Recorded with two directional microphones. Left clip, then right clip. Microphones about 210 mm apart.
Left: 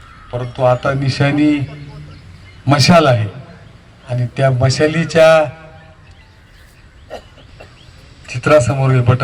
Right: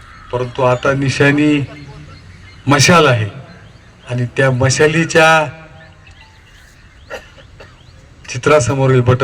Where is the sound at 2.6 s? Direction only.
30° right (ahead or behind).